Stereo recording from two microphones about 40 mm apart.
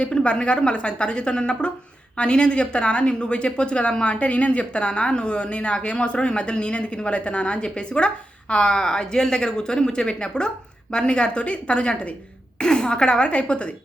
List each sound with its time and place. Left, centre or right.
0.0 s a woman's voice: left